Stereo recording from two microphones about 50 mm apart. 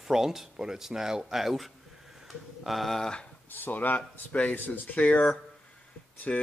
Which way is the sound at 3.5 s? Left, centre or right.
Left.